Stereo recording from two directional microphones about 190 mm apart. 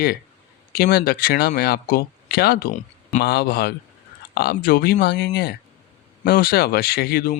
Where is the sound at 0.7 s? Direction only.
55° left (ahead or behind).